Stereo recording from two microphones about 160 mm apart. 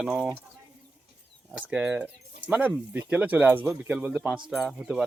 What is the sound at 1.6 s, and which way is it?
Speech, 5° right (ahead or behind).